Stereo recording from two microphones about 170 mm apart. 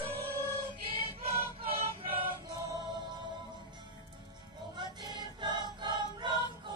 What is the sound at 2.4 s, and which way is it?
Music, 20° right (ahead or behind).